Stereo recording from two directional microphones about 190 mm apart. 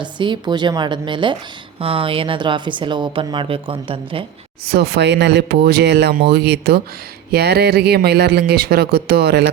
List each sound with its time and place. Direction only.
0.0 s a woman's voice: 25° right (ahead or behind)
4.6 s speech: 55° right (ahead or behind)